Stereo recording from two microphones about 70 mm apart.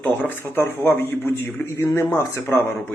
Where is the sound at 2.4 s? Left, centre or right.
Left.